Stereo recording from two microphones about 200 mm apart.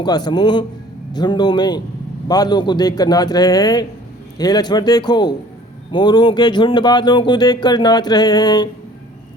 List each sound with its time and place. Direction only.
0.0 s speech: 20° left (ahead or behind)